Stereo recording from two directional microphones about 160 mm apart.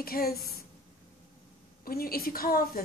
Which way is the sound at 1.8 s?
70° left (ahead or behind).